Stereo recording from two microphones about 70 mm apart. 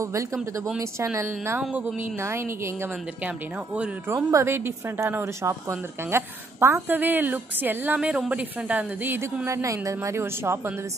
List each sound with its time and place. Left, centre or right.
0.0 s a woman's voice: right
3.3 s speech: centre
4.1 s a woman's voice: right
9.5 s a woman's voice: right